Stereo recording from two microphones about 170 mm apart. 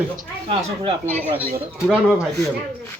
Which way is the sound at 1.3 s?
10° right (ahead or behind).